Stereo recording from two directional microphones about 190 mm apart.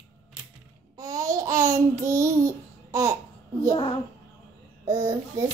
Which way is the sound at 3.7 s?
30° left (ahead or behind).